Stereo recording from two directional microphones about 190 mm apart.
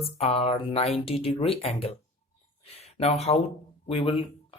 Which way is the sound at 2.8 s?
35° left (ahead or behind).